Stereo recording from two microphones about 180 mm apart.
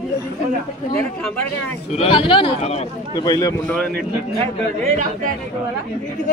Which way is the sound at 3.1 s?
25° left (ahead or behind).